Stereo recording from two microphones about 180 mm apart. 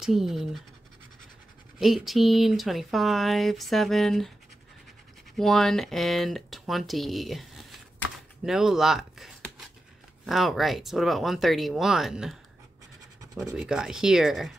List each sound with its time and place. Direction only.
0.0 s speech: centre (ahead or behind)
1.8 s speech: centre (ahead or behind)
5.4 s speech: centre (ahead or behind)
13.2 s scratch: 20° right (ahead or behind)
13.6 s speech: 5° right (ahead or behind)